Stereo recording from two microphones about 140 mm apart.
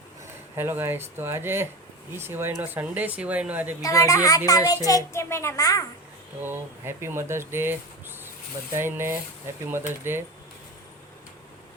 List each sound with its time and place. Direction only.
0.5 s speech: 15° right (ahead or behind)
3.8 s a woman's voice: 25° left (ahead or behind)
6.4 s speech: 15° right (ahead or behind)